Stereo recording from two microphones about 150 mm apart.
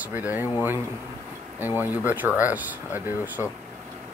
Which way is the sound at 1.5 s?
15° right (ahead or behind).